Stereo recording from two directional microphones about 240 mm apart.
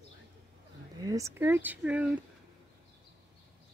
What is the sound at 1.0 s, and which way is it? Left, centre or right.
Speech, centre.